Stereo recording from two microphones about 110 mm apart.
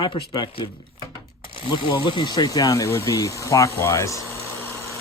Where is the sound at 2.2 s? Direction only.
35° left (ahead or behind).